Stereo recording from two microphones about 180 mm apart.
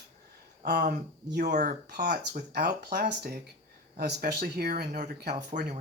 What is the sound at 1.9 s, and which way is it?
Speech, 55° right (ahead or behind).